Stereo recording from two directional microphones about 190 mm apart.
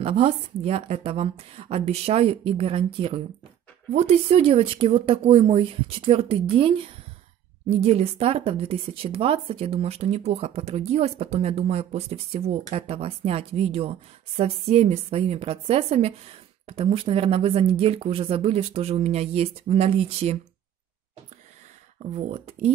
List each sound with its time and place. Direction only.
0.0 s a woman's voice: 30° right (ahead or behind)
7.8 s a woman's voice: 35° right (ahead or behind)
22.1 s a woman's voice: 35° right (ahead or behind)